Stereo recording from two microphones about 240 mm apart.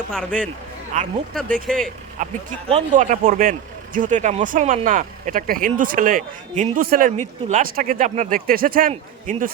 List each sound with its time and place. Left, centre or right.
0.1 s a man's voice: centre
0.9 s speech: right
1.3 s a man's voice: centre
2.2 s speech: right